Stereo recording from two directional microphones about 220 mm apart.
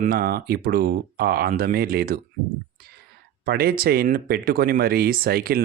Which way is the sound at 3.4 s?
45° right (ahead or behind).